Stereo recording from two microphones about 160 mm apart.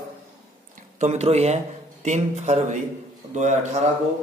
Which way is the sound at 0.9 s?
45° right (ahead or behind).